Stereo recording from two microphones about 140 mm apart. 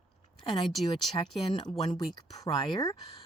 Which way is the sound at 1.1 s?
40° left (ahead or behind).